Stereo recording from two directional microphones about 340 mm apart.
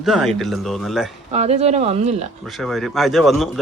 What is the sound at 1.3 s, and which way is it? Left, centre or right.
Speech, centre.